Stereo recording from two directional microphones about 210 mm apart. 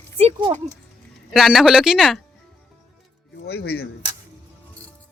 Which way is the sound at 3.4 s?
50° left (ahead or behind).